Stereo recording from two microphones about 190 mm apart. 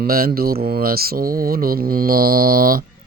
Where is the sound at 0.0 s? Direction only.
50° right (ahead or behind).